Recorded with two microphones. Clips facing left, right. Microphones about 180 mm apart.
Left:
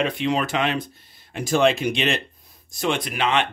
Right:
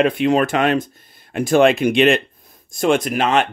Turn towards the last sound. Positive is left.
turn(degrees=-45)  # may be behind; listen again after turning